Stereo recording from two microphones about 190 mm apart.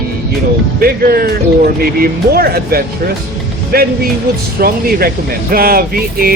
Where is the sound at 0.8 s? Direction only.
50° right (ahead or behind).